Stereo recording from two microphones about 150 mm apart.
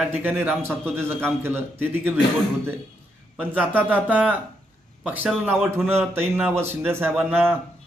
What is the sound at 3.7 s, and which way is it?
Speech, 10° left (ahead or behind).